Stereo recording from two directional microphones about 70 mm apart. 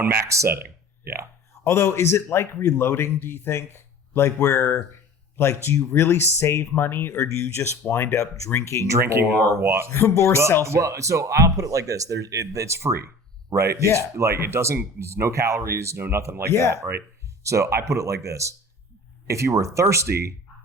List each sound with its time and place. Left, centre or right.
0.3 s speech: right
1.6 s a man's voice: left
7.1 s speech: left
8.9 s speech: right
9.9 s speech: left
10.6 s speech: right
14.2 s speech: right
16.5 s speech: left
17.4 s speech: right